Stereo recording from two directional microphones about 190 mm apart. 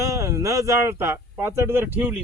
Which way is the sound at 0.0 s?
15° right (ahead or behind).